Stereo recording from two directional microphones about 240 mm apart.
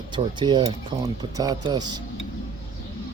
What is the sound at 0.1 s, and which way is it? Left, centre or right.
Speech, centre.